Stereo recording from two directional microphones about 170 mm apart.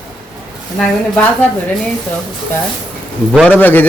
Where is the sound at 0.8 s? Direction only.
5° left (ahead or behind).